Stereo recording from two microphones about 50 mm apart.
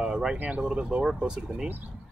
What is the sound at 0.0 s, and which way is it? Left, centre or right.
Speech, centre.